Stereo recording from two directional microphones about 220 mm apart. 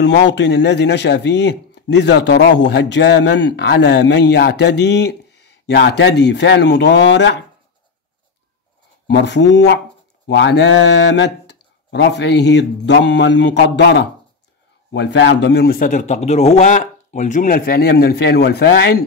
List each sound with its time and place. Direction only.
0.0 s speech: 50° left (ahead or behind)
9.1 s speech: 55° left (ahead or behind)